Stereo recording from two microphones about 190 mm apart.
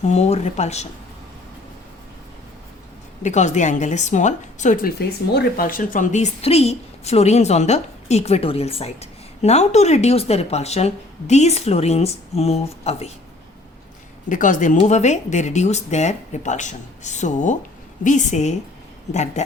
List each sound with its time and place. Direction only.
0.0 s speech: 35° left (ahead or behind)
3.2 s speech: 40° left (ahead or behind)
4.9 s speech: 55° left (ahead or behind); by 13.1 s 35° left (ahead or behind)
14.3 s speech: 45° left (ahead or behind)